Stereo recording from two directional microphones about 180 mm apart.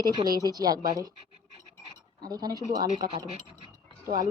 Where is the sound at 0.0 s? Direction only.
25° right (ahead or behind).